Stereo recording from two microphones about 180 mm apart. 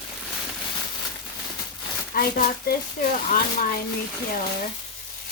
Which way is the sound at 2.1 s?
55° left (ahead or behind).